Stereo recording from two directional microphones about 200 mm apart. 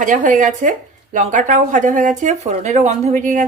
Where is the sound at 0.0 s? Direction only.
40° right (ahead or behind).